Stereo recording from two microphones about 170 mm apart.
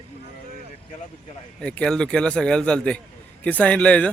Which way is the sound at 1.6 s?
5° left (ahead or behind).